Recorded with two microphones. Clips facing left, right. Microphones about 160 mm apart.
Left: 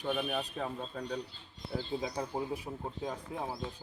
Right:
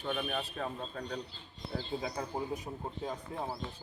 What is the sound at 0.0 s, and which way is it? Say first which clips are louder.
Speech: left 2 dB; 5° left (ahead or behind).